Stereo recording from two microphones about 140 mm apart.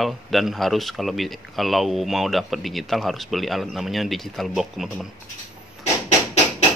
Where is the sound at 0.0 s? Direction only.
Centre (ahead or behind).